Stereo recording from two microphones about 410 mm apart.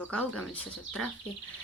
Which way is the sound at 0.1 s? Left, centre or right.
Centre.